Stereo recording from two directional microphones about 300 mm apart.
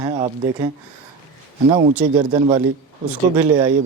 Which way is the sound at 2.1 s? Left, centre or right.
Centre.